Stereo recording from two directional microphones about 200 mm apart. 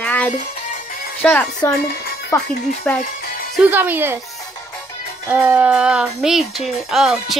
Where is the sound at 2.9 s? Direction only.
10° left (ahead or behind).